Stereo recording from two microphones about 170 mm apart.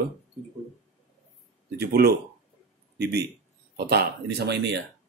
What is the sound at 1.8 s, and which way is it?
Speech, 70° right (ahead or behind).